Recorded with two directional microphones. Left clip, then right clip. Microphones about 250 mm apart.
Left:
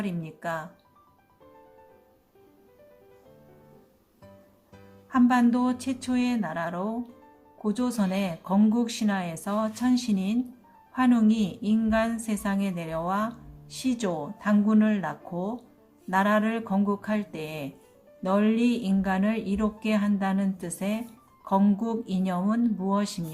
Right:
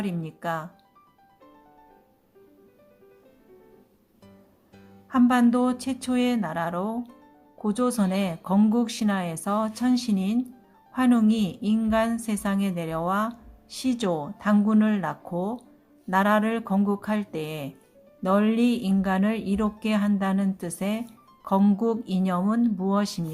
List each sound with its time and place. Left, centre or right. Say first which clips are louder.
0.0 s a woman's voice: right 2 dB; right
5.0 s a woman's voice: right 1 dB; right